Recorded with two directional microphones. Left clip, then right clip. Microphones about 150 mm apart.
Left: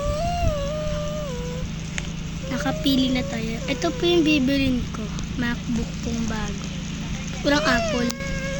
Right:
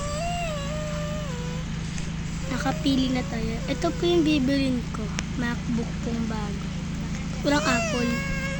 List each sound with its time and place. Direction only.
2.5 s a woman's voice: 5° right (ahead or behind)
7.4 s speech: 5° right (ahead or behind)
7.8 s speech: 30° left (ahead or behind)